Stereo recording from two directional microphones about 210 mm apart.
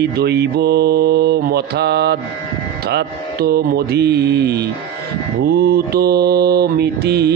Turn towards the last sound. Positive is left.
turn(degrees=-50)  # may be behind; listen again after turning